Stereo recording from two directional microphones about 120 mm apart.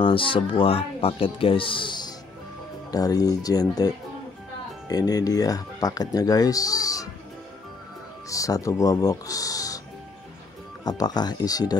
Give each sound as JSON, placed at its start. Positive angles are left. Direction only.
{"t": 0.0, "sound": "speech", "side_deg": 45}
{"t": 8.3, "sound": "speech", "side_deg": 30}
{"t": 10.8, "sound": "speech", "side_deg": 35}